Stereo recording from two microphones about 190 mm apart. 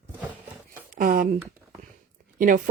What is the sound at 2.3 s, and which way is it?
Speech, 45° right (ahead or behind).